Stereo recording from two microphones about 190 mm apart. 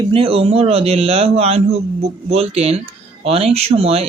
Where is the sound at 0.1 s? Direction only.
30° right (ahead or behind).